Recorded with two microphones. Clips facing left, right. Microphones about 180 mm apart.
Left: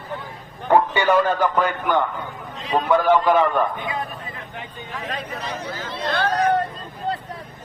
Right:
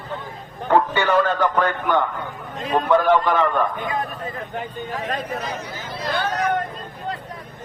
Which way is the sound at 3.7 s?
45° right (ahead or behind).